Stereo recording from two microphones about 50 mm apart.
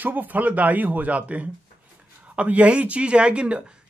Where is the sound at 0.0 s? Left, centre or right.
Right.